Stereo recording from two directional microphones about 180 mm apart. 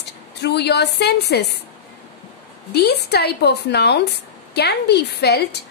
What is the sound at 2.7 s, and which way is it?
A woman's voice, 65° left (ahead or behind).